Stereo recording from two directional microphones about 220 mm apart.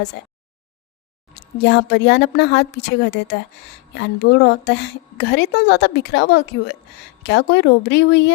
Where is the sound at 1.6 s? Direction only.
50° left (ahead or behind).